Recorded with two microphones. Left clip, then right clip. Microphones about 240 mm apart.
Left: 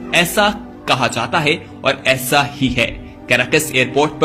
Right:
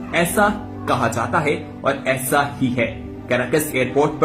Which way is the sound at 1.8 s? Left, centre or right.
Left.